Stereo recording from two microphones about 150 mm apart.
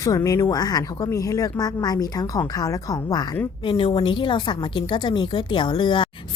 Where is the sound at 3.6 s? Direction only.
35° left (ahead or behind).